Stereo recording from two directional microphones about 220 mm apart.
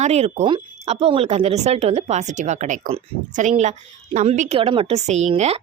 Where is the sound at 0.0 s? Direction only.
30° right (ahead or behind).